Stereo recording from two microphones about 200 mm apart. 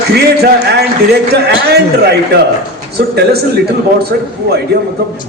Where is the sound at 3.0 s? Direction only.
55° right (ahead or behind).